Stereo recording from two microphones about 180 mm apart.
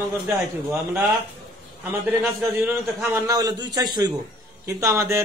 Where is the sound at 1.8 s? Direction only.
10° right (ahead or behind).